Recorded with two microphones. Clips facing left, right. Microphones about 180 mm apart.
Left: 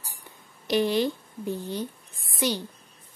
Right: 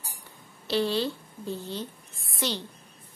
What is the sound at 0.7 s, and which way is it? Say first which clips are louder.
A child's voice: left 3 dB; 15° left (ahead or behind).